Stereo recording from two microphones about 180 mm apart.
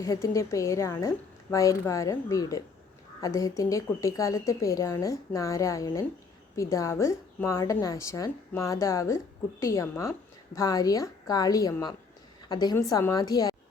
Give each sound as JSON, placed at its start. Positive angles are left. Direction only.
{"t": 0.0, "sound": "a woman's voice", "side_deg": 15}